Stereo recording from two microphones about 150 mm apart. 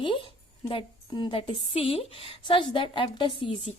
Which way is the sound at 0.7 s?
30° left (ahead or behind).